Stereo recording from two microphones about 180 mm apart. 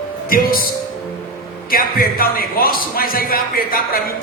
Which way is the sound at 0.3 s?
55° left (ahead or behind).